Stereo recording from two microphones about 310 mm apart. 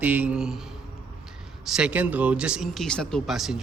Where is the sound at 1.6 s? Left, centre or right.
Centre.